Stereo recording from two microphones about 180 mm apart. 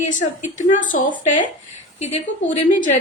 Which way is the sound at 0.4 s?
45° left (ahead or behind).